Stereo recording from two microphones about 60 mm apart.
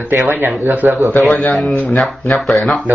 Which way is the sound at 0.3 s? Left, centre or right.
Right.